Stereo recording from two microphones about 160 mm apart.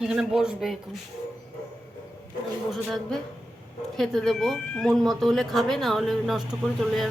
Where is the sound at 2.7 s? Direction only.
Centre (ahead or behind).